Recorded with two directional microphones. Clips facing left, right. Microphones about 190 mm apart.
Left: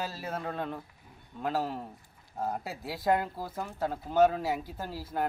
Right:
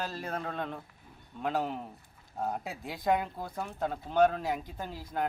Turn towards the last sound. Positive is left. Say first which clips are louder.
# left 2 dB
turn(degrees=5)  # may be behind; listen again after turning